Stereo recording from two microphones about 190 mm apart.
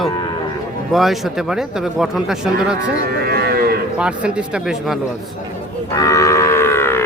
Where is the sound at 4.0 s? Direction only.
5° right (ahead or behind).